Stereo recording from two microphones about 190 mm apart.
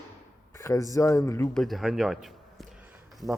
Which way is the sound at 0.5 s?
15° left (ahead or behind).